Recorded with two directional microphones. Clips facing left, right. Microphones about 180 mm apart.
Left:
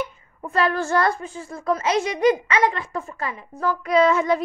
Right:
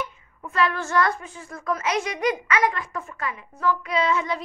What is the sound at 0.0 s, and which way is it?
A woman's voice, 35° left (ahead or behind).